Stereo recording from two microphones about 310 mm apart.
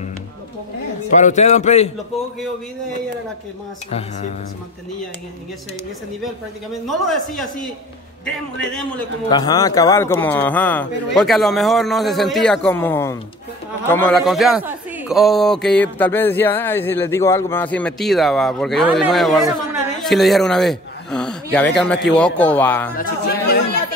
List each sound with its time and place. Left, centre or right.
1.1 s a man's voice: left
6.7 s a man's voice: centre
9.3 s a man's voice: centre
22.9 s chatter: left